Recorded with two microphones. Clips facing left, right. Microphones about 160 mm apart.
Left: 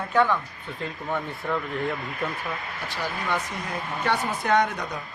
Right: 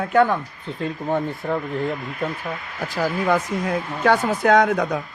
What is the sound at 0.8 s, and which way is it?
Speech, 35° right (ahead or behind).